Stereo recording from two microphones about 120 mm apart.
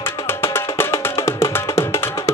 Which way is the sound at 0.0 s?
20° left (ahead or behind).